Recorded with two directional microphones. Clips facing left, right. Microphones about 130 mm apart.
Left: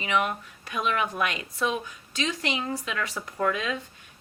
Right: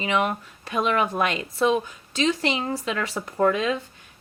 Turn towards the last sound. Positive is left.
turn(degrees=-30)  # may be behind; listen again after turning